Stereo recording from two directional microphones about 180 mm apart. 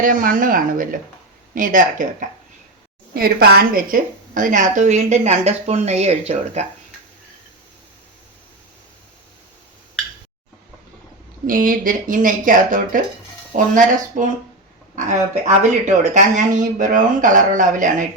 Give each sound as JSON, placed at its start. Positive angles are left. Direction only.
{"t": 0.0, "sound": "speech", "side_deg": -50}
{"t": 3.2, "sound": "a woman's voice", "side_deg": -55}
{"t": 11.4, "sound": "a woman's voice", "side_deg": -50}